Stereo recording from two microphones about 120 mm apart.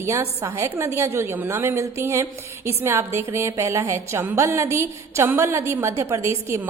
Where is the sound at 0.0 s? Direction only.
20° right (ahead or behind).